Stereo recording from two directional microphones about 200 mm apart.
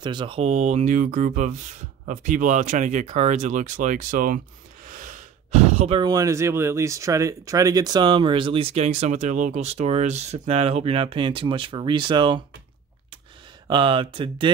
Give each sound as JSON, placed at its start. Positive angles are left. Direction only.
{"t": 0.0, "sound": "speech", "side_deg": -25}
{"t": 13.7, "sound": "speech", "side_deg": -25}